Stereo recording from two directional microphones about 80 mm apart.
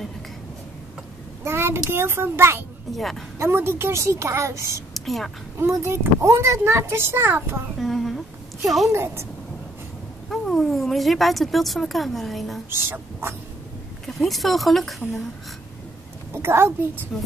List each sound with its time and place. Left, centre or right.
1.4 s child singing: right
1.9 s speech: right
3.0 s speech: centre
3.3 s speech: right
4.9 s a woman's voice: centre
5.6 s speech: right
7.8 s a sound: centre
8.6 s speech: centre
8.9 s speech: right
10.3 s speech: centre
12.6 s speech: right
14.0 s speech: centre
16.3 s a child's voice: right